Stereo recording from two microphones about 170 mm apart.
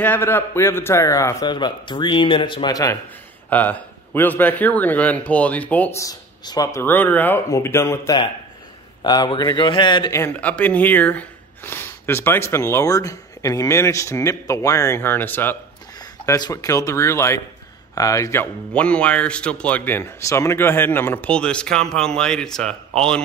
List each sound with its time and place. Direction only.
0.0 s a man's voice: 10° left (ahead or behind)
3.4 s a man's voice: 10° left (ahead or behind)